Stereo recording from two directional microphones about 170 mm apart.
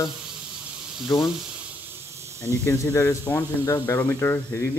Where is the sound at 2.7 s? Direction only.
15° left (ahead or behind).